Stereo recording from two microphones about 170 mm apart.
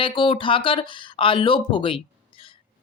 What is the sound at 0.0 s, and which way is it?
Speech, 30° left (ahead or behind).